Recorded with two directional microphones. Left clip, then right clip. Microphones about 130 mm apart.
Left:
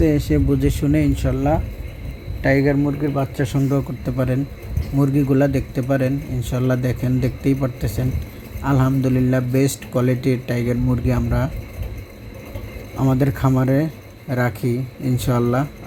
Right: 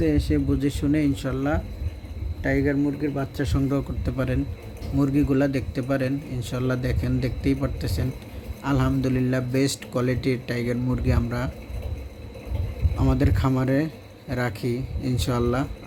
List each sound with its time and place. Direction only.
0.3 s a man's voice: 30° left (ahead or behind)
2.4 s a man's voice: 40° left (ahead or behind)
3.2 s a man's voice: 25° left (ahead or behind)
13.0 s a man's voice: 25° left (ahead or behind)